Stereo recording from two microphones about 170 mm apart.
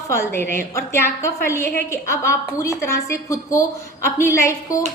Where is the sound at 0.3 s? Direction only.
15° left (ahead or behind).